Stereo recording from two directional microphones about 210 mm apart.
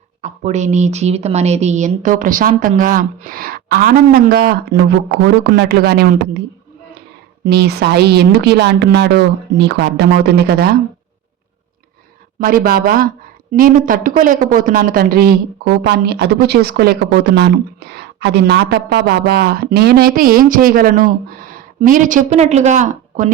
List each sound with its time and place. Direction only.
0.2 s a woman's voice: 35° right (ahead or behind)
7.4 s a woman's voice: 50° right (ahead or behind)
12.4 s a woman's voice: 45° right (ahead or behind)